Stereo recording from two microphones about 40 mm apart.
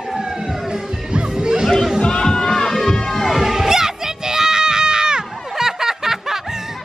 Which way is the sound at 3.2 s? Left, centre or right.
Centre.